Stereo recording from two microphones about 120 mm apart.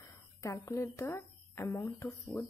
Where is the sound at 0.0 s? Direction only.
25° left (ahead or behind).